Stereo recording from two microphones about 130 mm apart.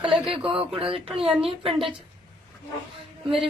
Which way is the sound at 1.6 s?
45° right (ahead or behind).